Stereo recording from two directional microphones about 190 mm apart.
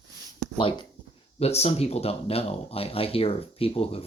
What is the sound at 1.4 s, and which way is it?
Speech, 35° left (ahead or behind).